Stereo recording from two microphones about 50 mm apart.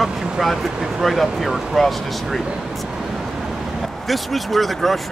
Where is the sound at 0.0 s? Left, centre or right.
Centre.